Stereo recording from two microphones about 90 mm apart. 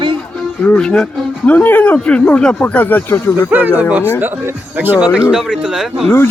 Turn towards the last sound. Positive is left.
turn(degrees=-10)  # may be behind; listen again after turning